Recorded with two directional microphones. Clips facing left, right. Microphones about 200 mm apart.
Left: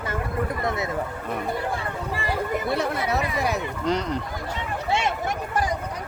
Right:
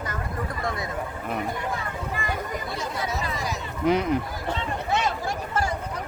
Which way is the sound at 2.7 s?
60° left (ahead or behind).